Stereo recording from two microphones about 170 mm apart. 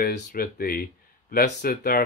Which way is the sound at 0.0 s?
65° left (ahead or behind).